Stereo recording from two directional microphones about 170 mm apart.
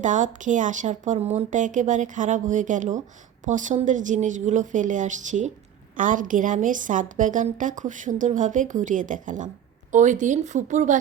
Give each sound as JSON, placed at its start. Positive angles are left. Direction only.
{"t": 0.0, "sound": "a woman's voice", "side_deg": -45}